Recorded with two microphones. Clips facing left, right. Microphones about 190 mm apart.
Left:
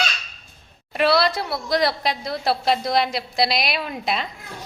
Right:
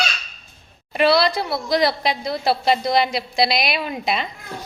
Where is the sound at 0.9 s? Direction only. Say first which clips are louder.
Right 2 dB; centre (ahead or behind).